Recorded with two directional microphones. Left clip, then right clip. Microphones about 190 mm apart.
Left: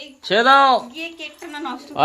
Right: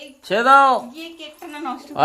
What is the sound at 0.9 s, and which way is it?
Speech, 40° right (ahead or behind).